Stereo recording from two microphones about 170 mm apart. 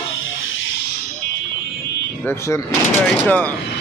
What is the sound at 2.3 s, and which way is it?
Speech, 15° left (ahead or behind).